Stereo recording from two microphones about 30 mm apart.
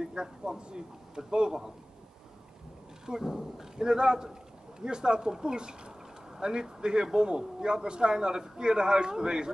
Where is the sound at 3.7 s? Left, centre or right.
Right.